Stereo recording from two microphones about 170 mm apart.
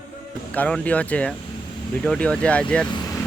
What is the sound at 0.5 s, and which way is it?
Speech, 10° left (ahead or behind).